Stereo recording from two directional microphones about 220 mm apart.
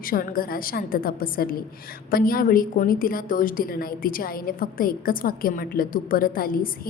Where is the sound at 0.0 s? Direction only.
40° left (ahead or behind).